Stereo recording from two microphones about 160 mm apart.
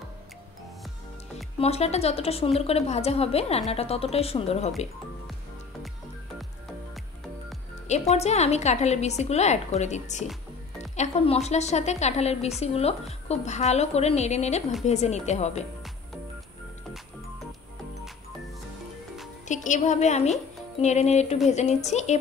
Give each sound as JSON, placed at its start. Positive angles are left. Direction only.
{"t": 1.6, "sound": "a woman's voice", "side_deg": 40}
{"t": 7.9, "sound": "a woman's voice", "side_deg": 45}
{"t": 19.4, "sound": "a woman's voice", "side_deg": 50}